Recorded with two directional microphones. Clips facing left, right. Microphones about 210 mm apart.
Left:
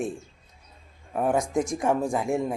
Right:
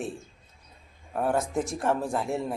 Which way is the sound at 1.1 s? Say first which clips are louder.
Left 2 dB; 15° left (ahead or behind).